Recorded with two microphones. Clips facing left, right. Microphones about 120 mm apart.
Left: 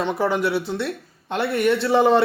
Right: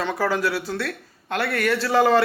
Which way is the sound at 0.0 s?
20° left (ahead or behind).